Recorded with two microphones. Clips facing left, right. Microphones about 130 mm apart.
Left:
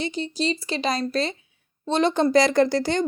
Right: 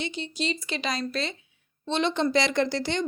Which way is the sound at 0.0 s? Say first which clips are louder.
Left 5 dB; 40° left (ahead or behind).